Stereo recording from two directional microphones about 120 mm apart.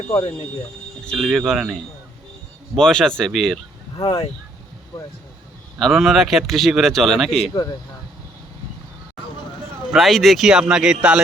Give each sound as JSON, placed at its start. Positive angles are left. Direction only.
{"t": 1.0, "sound": "speech", "side_deg": 0}
{"t": 2.7, "sound": "speech", "side_deg": 5}
{"t": 3.9, "sound": "speech", "side_deg": 50}
{"t": 5.8, "sound": "speech", "side_deg": 0}
{"t": 7.5, "sound": "speech", "side_deg": 35}
{"t": 9.9, "sound": "speech", "side_deg": 0}